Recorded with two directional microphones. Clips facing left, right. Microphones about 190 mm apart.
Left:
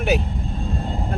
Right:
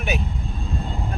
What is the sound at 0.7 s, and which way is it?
Vehicle, 35° left (ahead or behind).